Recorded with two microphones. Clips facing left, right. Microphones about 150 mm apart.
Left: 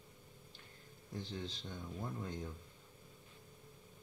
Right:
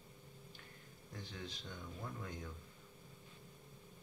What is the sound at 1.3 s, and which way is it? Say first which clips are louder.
Speech: left 1 dB; 25° left (ahead or behind).